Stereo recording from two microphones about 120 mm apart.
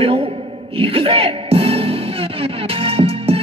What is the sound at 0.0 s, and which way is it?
Music, 50° right (ahead or behind).